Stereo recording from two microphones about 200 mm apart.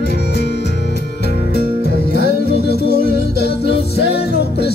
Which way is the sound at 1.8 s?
55° left (ahead or behind).